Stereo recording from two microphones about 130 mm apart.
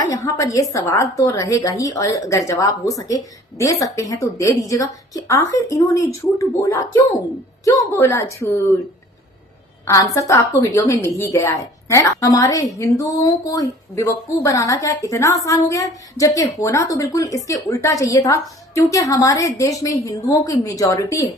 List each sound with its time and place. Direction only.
0.1 s a woman's voice: 25° left (ahead or behind)
10.2 s a woman's voice: 25° left (ahead or behind)